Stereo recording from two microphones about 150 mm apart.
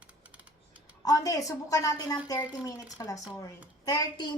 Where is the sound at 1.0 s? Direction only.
25° left (ahead or behind).